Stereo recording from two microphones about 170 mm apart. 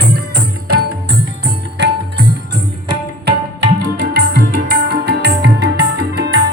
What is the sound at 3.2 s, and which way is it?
Tabla, 85° right.